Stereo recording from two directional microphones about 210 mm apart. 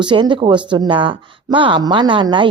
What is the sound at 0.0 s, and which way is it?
Speech, 20° right (ahead or behind).